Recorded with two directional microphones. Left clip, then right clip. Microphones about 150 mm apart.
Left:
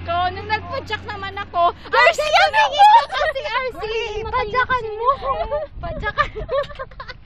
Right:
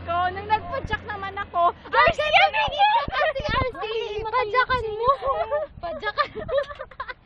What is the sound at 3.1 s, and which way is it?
Speech, 20° left (ahead or behind).